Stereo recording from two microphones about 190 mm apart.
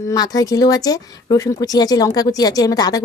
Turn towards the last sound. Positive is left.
turn(degrees=20)  # may be behind; listen again after turning